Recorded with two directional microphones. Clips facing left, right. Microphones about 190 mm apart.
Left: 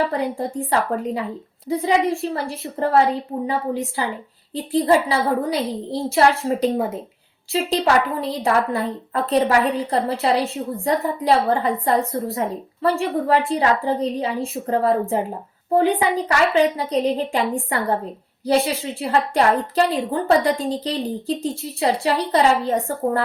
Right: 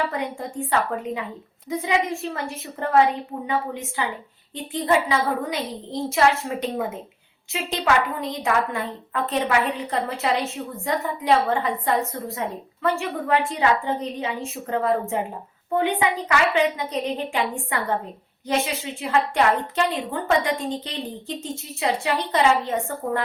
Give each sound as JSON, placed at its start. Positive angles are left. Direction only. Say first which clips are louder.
{"t": 0.0, "sound": "a woman's voice", "louder": "left 5 dB", "side_deg": 35}